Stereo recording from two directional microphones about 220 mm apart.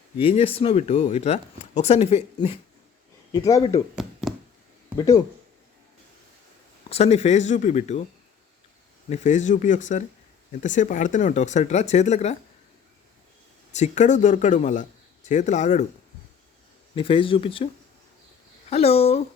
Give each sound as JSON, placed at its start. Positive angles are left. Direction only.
{"t": 0.2, "sound": "speech", "side_deg": 25}
{"t": 3.3, "sound": "speech", "side_deg": 15}
{"t": 3.9, "sound": "chopping", "side_deg": 0}
{"t": 4.9, "sound": "speech", "side_deg": 15}
{"t": 6.9, "sound": "a man's voice", "side_deg": 30}
{"t": 9.0, "sound": "a man's voice", "side_deg": 30}
{"t": 13.7, "sound": "a man's voice", "side_deg": 35}
{"t": 16.9, "sound": "speech", "side_deg": 25}
{"t": 18.7, "sound": "speech", "side_deg": 25}